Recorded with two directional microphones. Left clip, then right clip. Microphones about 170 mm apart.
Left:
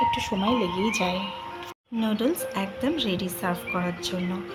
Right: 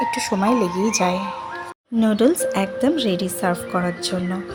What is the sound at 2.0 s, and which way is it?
Speech, 40° right (ahead or behind).